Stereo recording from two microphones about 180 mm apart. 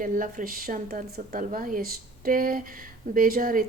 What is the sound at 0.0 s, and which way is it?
A woman's voice, 50° right (ahead or behind).